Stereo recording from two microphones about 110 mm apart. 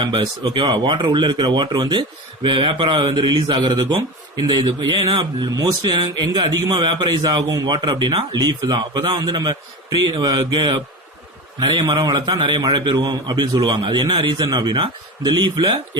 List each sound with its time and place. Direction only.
0.0 s a man's voice: 45° right (ahead or behind)
12.1 s a man's voice: 35° right (ahead or behind)
12.4 s speech: 45° right (ahead or behind)